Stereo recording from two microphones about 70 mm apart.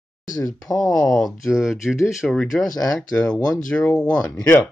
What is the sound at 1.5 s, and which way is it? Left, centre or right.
Speech, centre.